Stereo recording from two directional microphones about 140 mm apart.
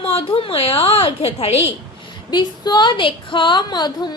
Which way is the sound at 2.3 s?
30° left (ahead or behind).